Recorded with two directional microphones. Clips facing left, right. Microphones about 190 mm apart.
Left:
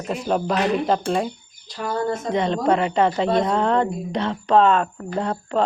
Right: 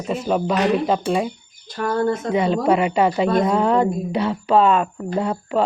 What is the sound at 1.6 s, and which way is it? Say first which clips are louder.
Cricket: right 4 dB; 55° right (ahead or behind).